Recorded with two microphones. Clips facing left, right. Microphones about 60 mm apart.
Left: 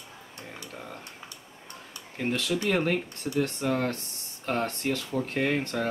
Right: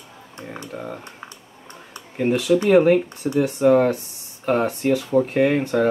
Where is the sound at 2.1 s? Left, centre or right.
Centre.